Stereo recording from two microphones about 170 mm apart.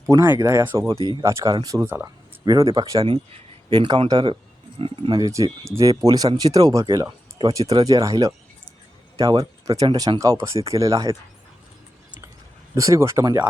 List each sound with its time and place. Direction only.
0.1 s speech: 20° right (ahead or behind)
12.7 s speech: 20° right (ahead or behind)